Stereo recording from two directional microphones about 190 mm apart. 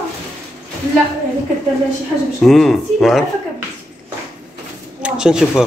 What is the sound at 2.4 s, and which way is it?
Speech, centre (ahead or behind).